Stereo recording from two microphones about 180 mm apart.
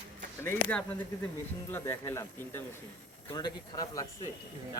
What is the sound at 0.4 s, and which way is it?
Speech, 5° left (ahead or behind).